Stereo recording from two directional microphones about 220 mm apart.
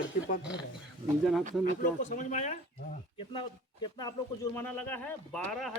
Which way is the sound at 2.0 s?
35° left (ahead or behind).